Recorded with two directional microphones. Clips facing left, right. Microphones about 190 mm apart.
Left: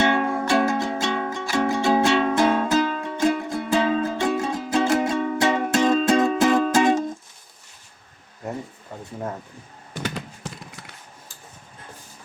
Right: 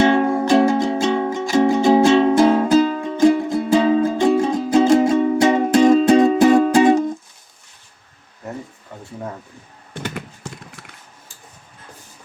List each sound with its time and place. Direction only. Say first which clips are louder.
0.0 s music: right 6 dB; 30° right (ahead or behind)
5.8 s music: right 7 dB; 15° right (ahead or behind)